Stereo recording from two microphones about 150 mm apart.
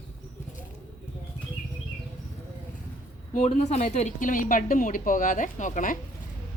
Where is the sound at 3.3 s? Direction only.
50° left (ahead or behind).